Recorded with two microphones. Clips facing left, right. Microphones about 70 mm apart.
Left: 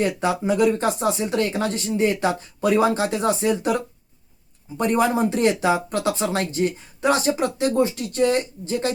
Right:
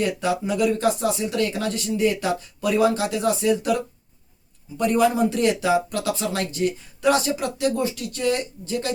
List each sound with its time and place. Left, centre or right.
0.2 s speech: left